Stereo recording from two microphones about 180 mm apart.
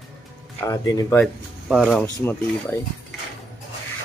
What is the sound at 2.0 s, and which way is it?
Speech, 15° left (ahead or behind).